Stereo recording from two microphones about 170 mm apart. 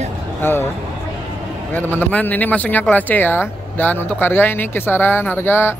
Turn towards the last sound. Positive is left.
turn(degrees=15)  # may be behind; listen again after turning